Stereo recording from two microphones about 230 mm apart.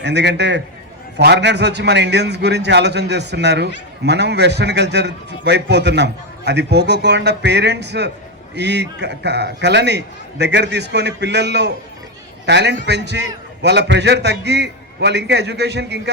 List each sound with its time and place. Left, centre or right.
0.0 s a man's voice: right